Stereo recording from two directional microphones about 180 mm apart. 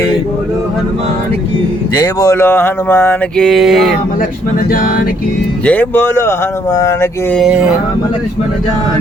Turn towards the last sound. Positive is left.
turn(degrees=-5)  # may be behind; listen again after turning